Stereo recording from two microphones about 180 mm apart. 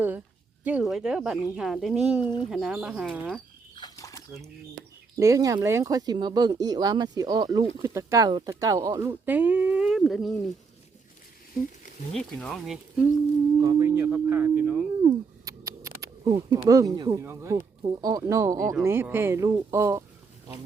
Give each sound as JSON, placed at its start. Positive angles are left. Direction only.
{"t": 0.6, "sound": "speech", "side_deg": -5}
{"t": 2.2, "sound": "speech", "side_deg": 25}
{"t": 2.5, "sound": "speech", "side_deg": -5}
{"t": 3.8, "sound": "a sound", "side_deg": 20}
{"t": 4.7, "sound": "speech", "side_deg": -15}
{"t": 12.1, "sound": "speech", "side_deg": 0}
{"t": 13.6, "sound": "speech", "side_deg": -20}
{"t": 15.4, "sound": "speech", "side_deg": -20}